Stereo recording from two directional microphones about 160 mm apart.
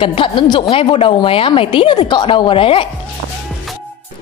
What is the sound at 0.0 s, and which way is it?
A woman's voice, 35° left (ahead or behind).